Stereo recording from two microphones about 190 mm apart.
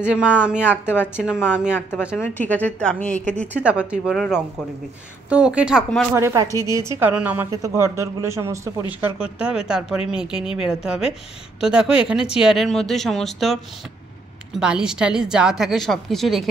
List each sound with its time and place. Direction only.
0.0 s a woman's voice: 5° right (ahead or behind)
0.7 s a woman's voice: 10° left (ahead or behind)
1.1 s a woman's voice: 5° right (ahead or behind)
2.2 s a woman's voice: 10° left (ahead or behind)
3.5 s a woman's voice: 5° right (ahead or behind)
6.1 s a woman's voice: 15° right (ahead or behind); by 16.4 s centre (ahead or behind)